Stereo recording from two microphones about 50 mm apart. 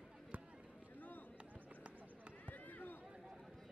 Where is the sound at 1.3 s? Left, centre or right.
Right.